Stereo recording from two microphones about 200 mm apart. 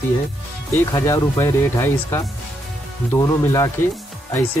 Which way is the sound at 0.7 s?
15° left (ahead or behind).